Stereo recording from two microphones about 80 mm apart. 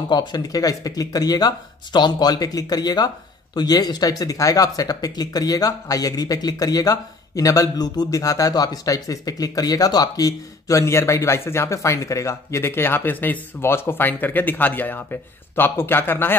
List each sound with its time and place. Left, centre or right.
0.1 s speech: left